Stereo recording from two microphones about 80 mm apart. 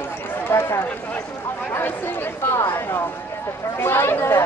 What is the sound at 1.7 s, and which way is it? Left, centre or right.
Speech, left.